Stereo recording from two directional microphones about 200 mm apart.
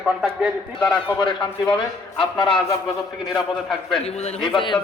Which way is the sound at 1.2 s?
25° left (ahead or behind).